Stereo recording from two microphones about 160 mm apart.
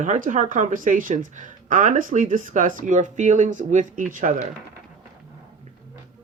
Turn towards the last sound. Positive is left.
turn(degrees=-55)  # may be behind; listen again after turning